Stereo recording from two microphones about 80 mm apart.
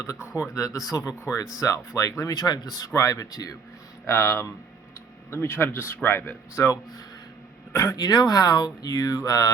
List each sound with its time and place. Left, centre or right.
0.1 s speech: left
1.2 s speech: left
4.0 s speech: left
6.6 s speech: left
7.9 s speech: left